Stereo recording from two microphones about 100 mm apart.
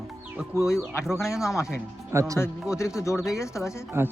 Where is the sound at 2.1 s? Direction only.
35° right (ahead or behind).